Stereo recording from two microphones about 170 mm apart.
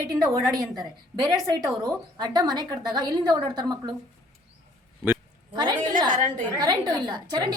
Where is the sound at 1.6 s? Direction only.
20° right (ahead or behind).